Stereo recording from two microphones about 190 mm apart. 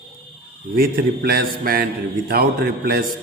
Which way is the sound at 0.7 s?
50° right (ahead or behind).